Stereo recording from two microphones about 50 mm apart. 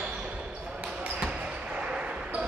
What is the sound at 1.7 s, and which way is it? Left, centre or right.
Basketball bounce, right.